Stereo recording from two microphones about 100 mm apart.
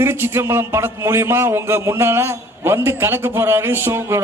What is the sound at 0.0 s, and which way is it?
A man's voice, 25° right (ahead or behind).